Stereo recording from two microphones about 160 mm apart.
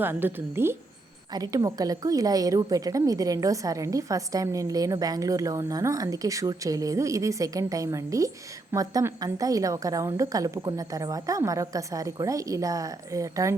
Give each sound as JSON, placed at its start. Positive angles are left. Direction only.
{"t": 0.0, "sound": "a woman's voice", "side_deg": -15}